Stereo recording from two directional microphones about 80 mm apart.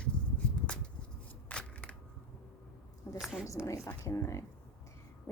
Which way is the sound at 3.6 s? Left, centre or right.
Left.